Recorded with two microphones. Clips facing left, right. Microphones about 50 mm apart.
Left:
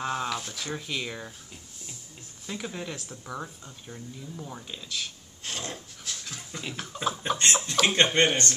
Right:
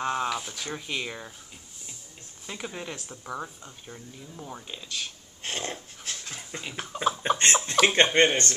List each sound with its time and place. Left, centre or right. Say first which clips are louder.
0.0 s speech: right 2 dB; centre
2.4 s speech: left 1 dB; centre
5.4 s dog: right 3 dB; right
6.6 s speech: right 3 dB; centre